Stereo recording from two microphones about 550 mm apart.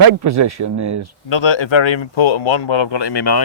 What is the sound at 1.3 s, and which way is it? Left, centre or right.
Speech, left.